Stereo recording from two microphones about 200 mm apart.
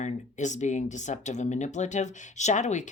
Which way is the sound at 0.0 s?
35° left (ahead or behind).